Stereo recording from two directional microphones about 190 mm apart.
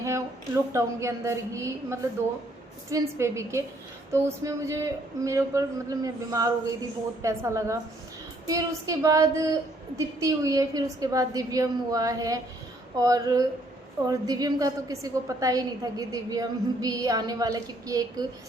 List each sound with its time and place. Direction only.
0.0 s a woman's voice: 15° right (ahead or behind)